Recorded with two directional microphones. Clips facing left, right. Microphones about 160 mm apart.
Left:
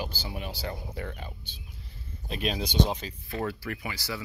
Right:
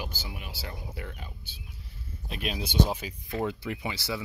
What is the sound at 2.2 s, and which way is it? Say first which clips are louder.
Speech: left 3 dB; 10° right (ahead or behind).